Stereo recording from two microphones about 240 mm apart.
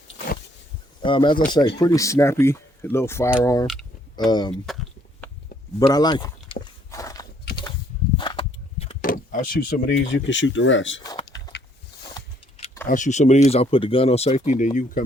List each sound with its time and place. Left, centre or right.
1.0 s speech: centre
3.7 s typing: centre
4.3 s speech: centre
5.8 s walk: centre
8.1 s door: centre; by 9.9 s left
10.2 s speech: left
12.1 s a sound: left
12.9 s speech: left